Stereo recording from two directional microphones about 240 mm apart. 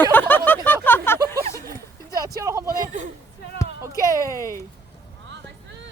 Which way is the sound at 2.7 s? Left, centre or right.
Right.